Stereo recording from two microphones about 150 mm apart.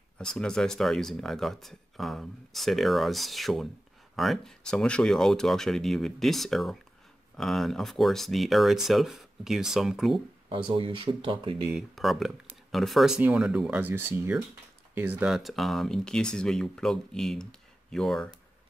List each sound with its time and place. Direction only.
0.2 s speech: 5° left (ahead or behind)
10.7 s speech: 35° right (ahead or behind)
11.7 s speech: centre (ahead or behind)